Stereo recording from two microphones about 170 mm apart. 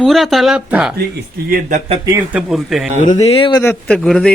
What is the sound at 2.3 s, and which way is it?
Speech, centre (ahead or behind).